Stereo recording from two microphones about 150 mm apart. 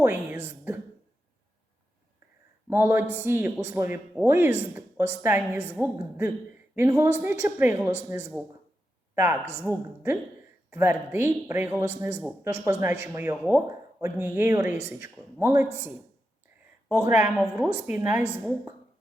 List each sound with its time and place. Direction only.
0.0 s speech: 15° right (ahead or behind)
2.6 s a man's voice: 15° right (ahead or behind)
16.9 s a man's voice: 15° right (ahead or behind)